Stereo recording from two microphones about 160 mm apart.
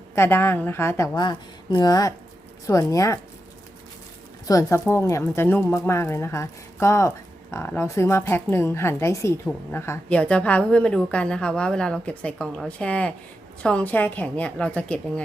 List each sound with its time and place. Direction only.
0.2 s a woman's voice: 15° left (ahead or behind)
4.4 s a woman's voice: 20° left (ahead or behind)